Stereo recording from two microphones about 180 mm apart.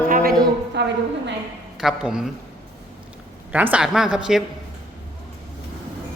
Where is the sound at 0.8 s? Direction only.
70° right (ahead or behind).